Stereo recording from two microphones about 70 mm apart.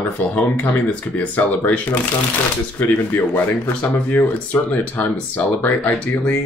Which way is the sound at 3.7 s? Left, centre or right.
Left.